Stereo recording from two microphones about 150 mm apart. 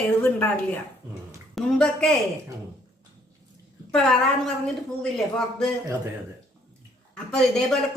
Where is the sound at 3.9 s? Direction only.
5° left (ahead or behind).